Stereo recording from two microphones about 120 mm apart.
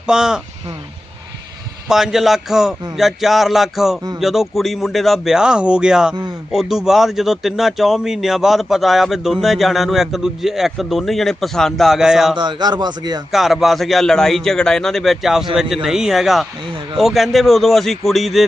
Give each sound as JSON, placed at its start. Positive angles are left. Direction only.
{"t": 0.0, "sound": "speech", "side_deg": -5}
{"t": 1.9, "sound": "speech", "side_deg": -5}
{"t": 12.4, "sound": "a man's voice", "side_deg": -35}
{"t": 13.3, "sound": "speech", "side_deg": 0}